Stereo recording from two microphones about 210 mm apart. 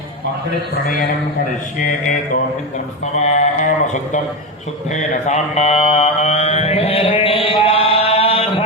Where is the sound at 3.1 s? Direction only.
30° left (ahead or behind).